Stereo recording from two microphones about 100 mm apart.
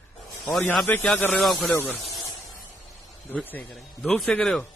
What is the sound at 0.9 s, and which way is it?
Speech, 20° left (ahead or behind).